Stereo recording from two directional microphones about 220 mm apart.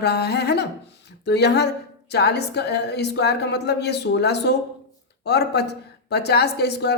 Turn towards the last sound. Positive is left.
turn(degrees=50)  # may be behind; listen again after turning